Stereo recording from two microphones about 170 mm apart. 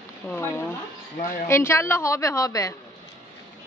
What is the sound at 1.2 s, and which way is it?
A woman's voice, 15° left (ahead or behind).